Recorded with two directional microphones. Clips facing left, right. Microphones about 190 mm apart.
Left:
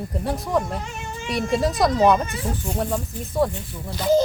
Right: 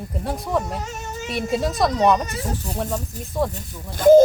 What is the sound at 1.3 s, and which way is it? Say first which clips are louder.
Speech: left 1 dB; centre (ahead or behind).